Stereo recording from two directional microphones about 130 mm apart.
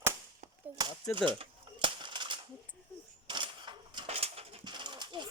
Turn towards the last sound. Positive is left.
turn(degrees=-35)  # may be behind; listen again after turning